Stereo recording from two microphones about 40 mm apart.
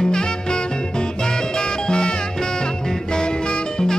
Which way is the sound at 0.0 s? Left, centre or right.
Centre.